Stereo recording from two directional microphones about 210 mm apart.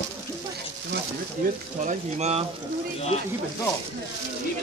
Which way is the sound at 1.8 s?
35° right (ahead or behind).